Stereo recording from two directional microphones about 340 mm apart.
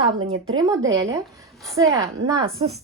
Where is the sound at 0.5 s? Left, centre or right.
Centre.